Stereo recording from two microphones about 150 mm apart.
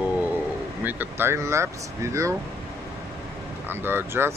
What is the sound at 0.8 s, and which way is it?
Speech, 10° right (ahead or behind).